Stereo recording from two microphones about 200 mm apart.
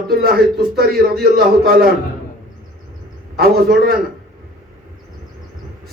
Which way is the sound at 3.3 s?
50° right (ahead or behind).